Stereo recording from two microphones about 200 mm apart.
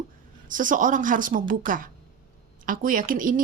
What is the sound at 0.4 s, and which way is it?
Speech, 40° right (ahead or behind).